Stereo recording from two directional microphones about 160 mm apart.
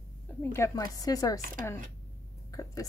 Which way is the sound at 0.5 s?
20° left (ahead or behind).